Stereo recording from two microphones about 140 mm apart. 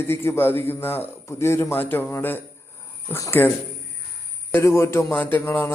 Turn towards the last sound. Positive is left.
turn(degrees=15)  # may be behind; listen again after turning